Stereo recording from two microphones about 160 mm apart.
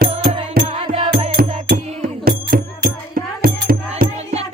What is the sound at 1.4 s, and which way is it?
Music, 65° right (ahead or behind).